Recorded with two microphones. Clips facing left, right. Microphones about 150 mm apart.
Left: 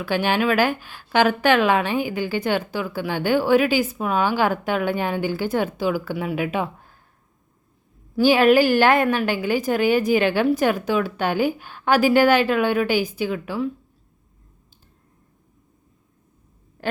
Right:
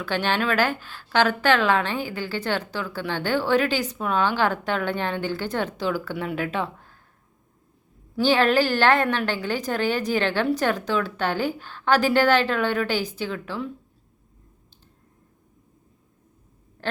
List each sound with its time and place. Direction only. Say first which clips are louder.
0.0 s a woman's voice: left 4 dB; 10° left (ahead or behind)
8.1 s a woman's voice: left 4 dB; 10° left (ahead or behind)